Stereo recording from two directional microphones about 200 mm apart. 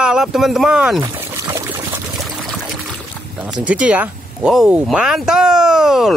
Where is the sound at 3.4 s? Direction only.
5° right (ahead or behind).